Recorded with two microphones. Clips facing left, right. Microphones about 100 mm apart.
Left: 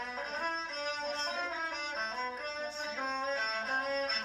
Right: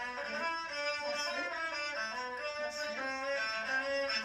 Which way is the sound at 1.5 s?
50° right (ahead or behind).